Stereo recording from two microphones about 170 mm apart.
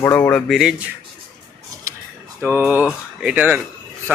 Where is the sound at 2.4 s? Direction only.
10° right (ahead or behind).